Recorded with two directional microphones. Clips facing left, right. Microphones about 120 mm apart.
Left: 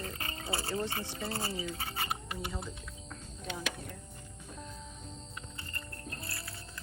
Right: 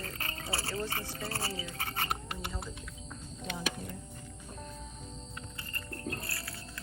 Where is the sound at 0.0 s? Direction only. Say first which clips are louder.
Left 1 dB; 20° left (ahead or behind).